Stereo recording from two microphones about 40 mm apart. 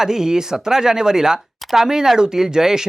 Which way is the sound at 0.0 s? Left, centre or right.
Centre.